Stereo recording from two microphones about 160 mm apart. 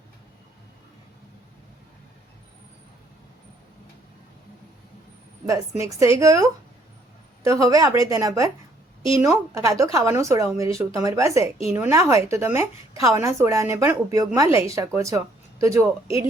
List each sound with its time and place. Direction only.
5.5 s a woman's voice: 20° right (ahead or behind)